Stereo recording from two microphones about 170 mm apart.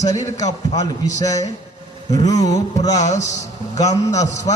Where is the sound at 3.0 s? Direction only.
45° left (ahead or behind).